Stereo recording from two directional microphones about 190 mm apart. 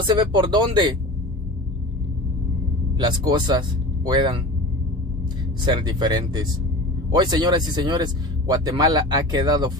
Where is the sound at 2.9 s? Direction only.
20° right (ahead or behind).